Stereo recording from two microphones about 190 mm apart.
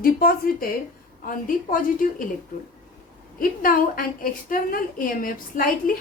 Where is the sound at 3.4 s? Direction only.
50° left (ahead or behind).